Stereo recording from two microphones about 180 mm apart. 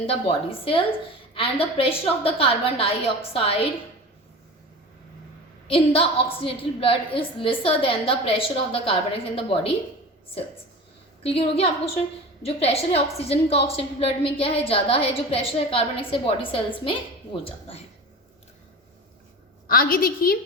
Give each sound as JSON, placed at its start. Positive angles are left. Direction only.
{"t": 0.1, "sound": "a woman's voice", "side_deg": 30}
{"t": 5.6, "sound": "a woman's voice", "side_deg": 30}
{"t": 11.2, "sound": "a woman's voice", "side_deg": 30}
{"t": 19.6, "sound": "a woman's voice", "side_deg": 50}